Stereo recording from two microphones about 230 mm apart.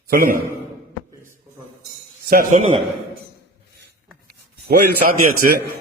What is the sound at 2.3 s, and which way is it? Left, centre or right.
Speech, right.